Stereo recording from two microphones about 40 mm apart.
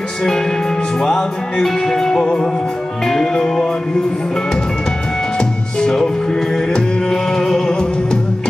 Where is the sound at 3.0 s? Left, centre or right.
Centre.